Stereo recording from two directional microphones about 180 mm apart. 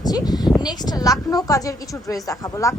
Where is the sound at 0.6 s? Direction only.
20° left (ahead or behind).